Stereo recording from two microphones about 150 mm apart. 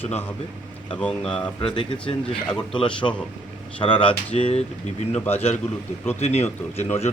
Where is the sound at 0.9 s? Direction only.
5° left (ahead or behind).